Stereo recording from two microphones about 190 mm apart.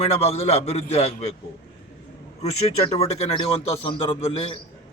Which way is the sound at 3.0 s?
30° left (ahead or behind).